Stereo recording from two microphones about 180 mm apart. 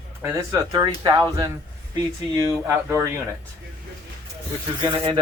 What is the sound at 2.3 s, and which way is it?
Speech, 15° right (ahead or behind).